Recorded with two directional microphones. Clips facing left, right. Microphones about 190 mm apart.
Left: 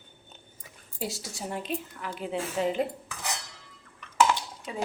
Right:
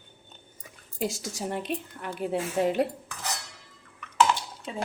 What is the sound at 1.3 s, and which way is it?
A woman's voice, 75° right (ahead or behind).